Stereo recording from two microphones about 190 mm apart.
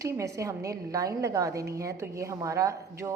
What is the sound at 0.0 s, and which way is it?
A woman's voice, 15° right (ahead or behind).